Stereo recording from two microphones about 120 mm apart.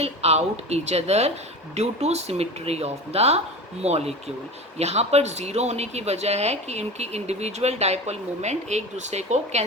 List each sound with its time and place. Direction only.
0.0 s speech: 60° right (ahead or behind)